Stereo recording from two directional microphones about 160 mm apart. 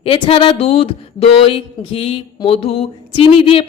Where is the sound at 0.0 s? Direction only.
35° left (ahead or behind).